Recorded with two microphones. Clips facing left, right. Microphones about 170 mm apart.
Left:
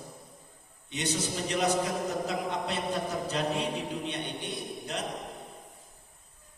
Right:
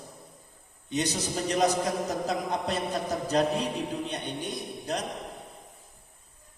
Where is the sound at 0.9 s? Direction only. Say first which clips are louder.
Right 3 dB; 40° right (ahead or behind).